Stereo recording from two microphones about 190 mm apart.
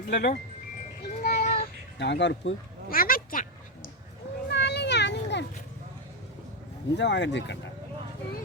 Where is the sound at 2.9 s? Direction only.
50° left (ahead or behind).